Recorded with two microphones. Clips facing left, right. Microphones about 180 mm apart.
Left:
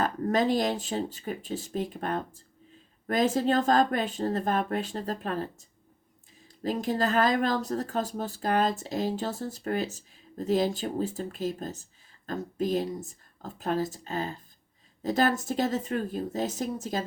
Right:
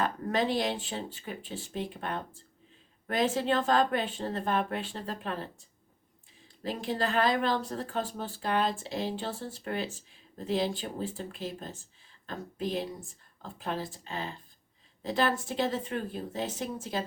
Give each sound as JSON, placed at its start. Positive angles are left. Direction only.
{"t": 0.0, "sound": "speech", "side_deg": 45}